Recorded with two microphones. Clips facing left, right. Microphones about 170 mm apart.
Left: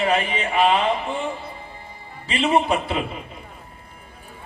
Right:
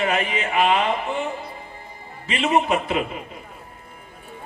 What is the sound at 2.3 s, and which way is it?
Speech, 35° left (ahead or behind).